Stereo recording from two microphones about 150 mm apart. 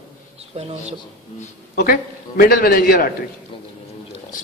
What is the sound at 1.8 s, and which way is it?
Speech, 80° left.